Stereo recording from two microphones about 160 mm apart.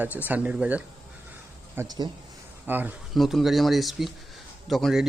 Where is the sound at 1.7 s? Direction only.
20° right (ahead or behind).